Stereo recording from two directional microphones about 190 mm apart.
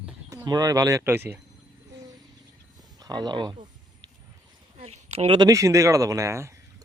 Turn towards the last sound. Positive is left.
turn(degrees=-15)  # may be behind; listen again after turning